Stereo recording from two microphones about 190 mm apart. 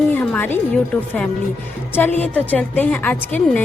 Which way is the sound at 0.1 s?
10° left (ahead or behind).